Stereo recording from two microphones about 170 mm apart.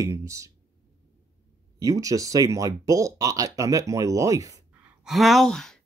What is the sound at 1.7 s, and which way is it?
Speech, 20° right (ahead or behind).